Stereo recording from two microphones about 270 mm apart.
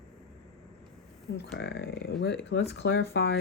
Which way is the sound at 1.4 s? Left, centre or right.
Left.